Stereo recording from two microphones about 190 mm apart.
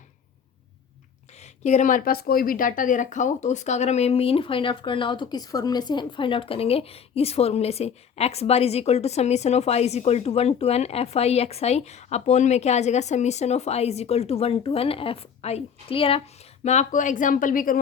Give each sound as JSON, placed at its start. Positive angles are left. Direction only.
{"t": 1.4, "sound": "speech", "side_deg": 35}
{"t": 16.6, "sound": "speech", "side_deg": 40}